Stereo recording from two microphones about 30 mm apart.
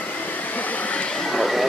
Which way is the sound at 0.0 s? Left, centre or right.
Left.